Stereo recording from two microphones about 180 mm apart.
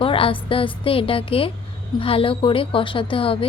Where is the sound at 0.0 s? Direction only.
30° left (ahead or behind).